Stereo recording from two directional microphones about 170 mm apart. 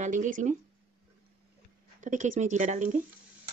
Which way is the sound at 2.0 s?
50° right (ahead or behind).